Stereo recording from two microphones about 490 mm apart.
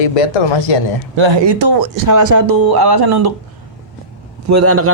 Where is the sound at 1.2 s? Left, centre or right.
Right.